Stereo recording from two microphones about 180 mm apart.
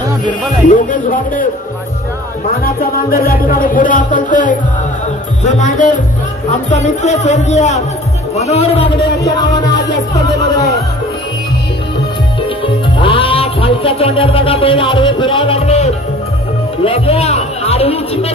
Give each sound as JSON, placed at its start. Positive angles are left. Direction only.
{"t": 0.7, "sound": "music", "side_deg": 50}
{"t": 2.6, "sound": "music", "side_deg": 55}
{"t": 9.2, "sound": "speech", "side_deg": 20}
{"t": 9.7, "sound": "music", "side_deg": 75}
{"t": 10.1, "sound": "speech", "side_deg": 20}
{"t": 13.0, "sound": "speech", "side_deg": 30}